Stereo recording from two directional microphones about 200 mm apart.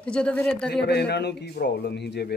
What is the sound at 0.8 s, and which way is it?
A man's voice, 55° left (ahead or behind).